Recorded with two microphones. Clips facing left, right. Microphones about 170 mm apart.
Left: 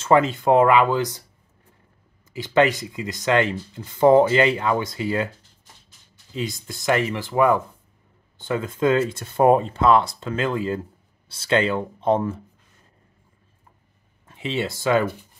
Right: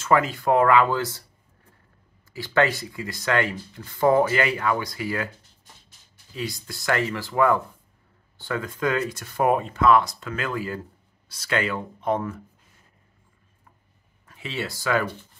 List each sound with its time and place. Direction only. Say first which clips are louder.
0.0 s speech: left 4 dB; 25° left (ahead or behind)
2.3 s speech: left 3 dB; 20° left (ahead or behind)
6.3 s speech: left 3 dB; 20° left (ahead or behind)
14.2 s speech: left 5 dB; 25° left (ahead or behind)